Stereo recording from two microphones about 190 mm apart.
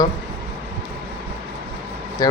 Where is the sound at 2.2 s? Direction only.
20° left (ahead or behind).